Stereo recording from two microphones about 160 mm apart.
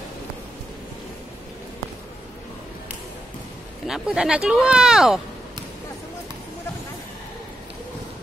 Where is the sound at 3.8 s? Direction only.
5° right (ahead or behind).